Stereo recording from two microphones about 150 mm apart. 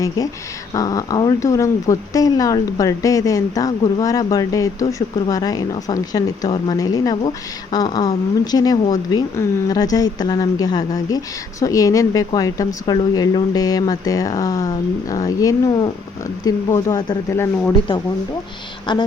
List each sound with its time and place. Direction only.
0.7 s speech: 25° left (ahead or behind)
18.9 s speech: 30° left (ahead or behind)